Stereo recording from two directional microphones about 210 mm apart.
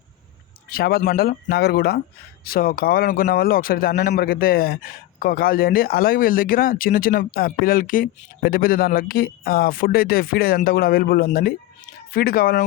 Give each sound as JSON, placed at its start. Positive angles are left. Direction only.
{"t": 0.7, "sound": "speech", "side_deg": 45}